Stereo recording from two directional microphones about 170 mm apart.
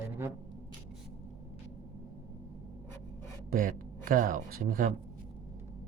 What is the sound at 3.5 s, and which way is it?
Speech, 55° right (ahead or behind).